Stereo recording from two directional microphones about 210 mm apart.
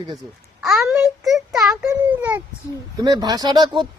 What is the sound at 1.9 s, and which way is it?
A child's voice, 10° right (ahead or behind).